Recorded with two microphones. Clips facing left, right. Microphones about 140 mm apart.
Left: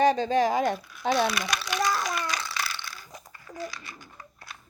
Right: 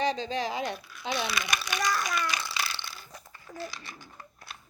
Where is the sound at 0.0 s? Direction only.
50° left (ahead or behind).